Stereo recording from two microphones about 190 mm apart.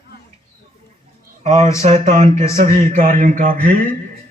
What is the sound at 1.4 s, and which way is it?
A man's voice, 35° right (ahead or behind).